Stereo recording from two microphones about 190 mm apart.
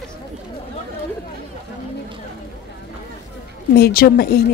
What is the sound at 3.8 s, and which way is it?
Speech, 55° left (ahead or behind).